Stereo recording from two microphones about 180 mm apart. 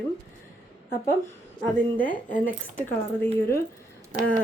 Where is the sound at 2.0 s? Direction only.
50° left (ahead or behind).